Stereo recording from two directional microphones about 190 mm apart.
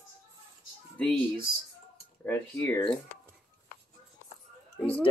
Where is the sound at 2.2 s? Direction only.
10° left (ahead or behind).